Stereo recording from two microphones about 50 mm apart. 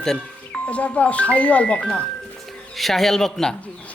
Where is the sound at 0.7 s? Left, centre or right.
Left.